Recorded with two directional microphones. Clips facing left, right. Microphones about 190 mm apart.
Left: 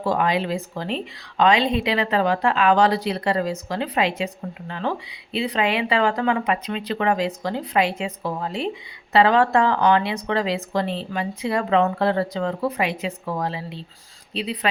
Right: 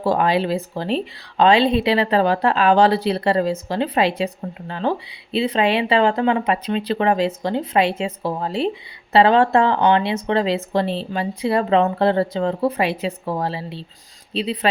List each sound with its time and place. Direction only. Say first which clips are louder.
0.0 s speech: right 3 dB; 35° right (ahead or behind)